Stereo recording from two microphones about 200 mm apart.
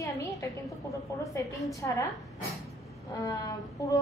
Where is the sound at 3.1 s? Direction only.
15° left (ahead or behind).